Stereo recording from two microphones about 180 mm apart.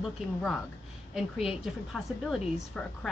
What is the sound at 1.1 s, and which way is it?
A woman's voice, 5° right (ahead or behind).